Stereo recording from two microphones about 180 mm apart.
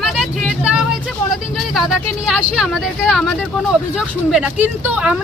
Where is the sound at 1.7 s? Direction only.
Centre (ahead or behind).